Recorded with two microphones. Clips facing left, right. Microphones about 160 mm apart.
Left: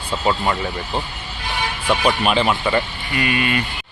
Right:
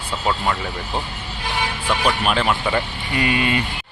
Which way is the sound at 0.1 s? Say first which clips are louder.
Left 2 dB; 5° left (ahead or behind).